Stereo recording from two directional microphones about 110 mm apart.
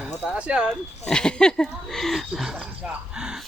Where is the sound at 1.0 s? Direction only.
10° left (ahead or behind).